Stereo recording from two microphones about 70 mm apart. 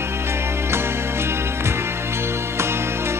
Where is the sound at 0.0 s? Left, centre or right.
Right.